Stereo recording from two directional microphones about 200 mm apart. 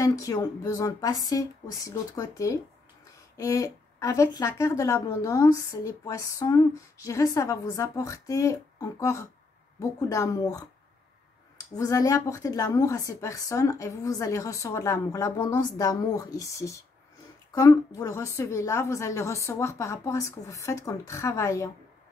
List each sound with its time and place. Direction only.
0.0 s a woman's voice: 15° left (ahead or behind)
11.7 s a woman's voice: 15° left (ahead or behind)